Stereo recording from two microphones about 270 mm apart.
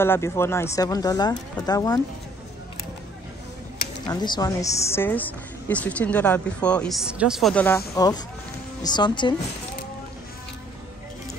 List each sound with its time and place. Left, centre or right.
0.0 s speech: centre
4.0 s a woman's voice: centre